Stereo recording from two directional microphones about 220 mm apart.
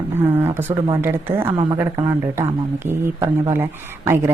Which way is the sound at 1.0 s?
10° right (ahead or behind).